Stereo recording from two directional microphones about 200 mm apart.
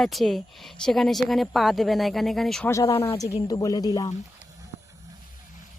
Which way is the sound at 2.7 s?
15° left (ahead or behind).